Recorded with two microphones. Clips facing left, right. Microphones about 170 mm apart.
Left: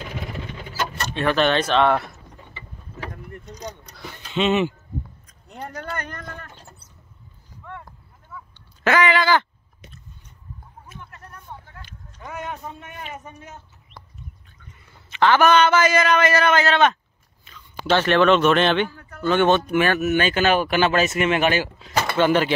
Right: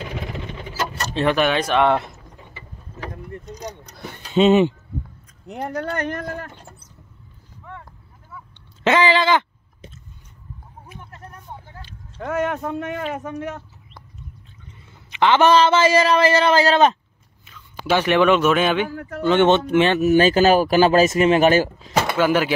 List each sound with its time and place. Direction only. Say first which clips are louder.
1.2 s speech: right 1 dB; 10° right (ahead or behind)
3.1 s vehicle: right 3 dB; 20° right (ahead or behind)
3.9 s a sound: right 2 dB; 50° right (ahead or behind)
4.4 s speech: right 6 dB; 35° right (ahead or behind)
8.8 s a sound: right 2 dB; 25° right (ahead or behind)
11.1 s vehicle: right 2 dB; 25° right (ahead or behind)
12.2 s speech: right 10 dB; 70° right (ahead or behind)
14.9 s a man's voice: right 1 dB; 15° right (ahead or behind); by 17.0 s 35° right (ahead or behind)
17.5 s speech: even; 10° right (ahead or behind)
18.9 s speech: right 11 dB; 85° right
19.2 s speech: right 2 dB; 20° right (ahead or behind); by 21.9 s 40° right (ahead or behind)
22.1 s speech: left 1 dB; 5° right (ahead or behind)